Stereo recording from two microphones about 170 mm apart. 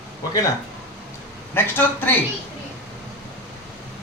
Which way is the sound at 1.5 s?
10° left (ahead or behind).